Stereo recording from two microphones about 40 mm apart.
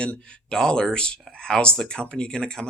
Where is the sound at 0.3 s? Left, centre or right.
Left.